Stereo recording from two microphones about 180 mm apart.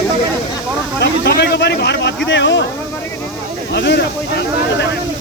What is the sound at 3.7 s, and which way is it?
Speech, 75° left (ahead or behind).